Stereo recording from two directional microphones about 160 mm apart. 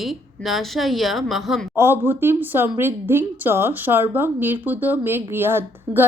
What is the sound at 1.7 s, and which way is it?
A woman's voice, 15° right (ahead or behind).